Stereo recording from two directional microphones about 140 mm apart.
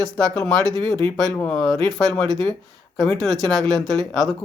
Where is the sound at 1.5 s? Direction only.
Centre (ahead or behind).